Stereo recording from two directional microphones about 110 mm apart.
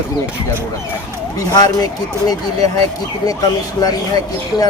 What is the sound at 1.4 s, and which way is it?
Speech, 35° left (ahead or behind).